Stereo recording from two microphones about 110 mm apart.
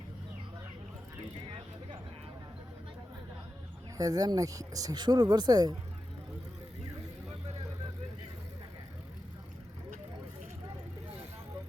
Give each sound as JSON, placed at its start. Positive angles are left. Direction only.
{"t": 3.9, "sound": "speech", "side_deg": -35}